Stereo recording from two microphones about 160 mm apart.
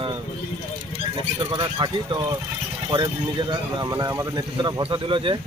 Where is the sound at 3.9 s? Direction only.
20° right (ahead or behind).